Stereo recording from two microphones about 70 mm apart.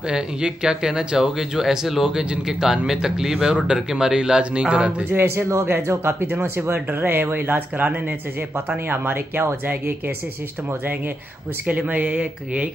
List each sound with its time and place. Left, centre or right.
0.1 s speech: centre
5.1 s a man's voice: right
11.6 s speech: centre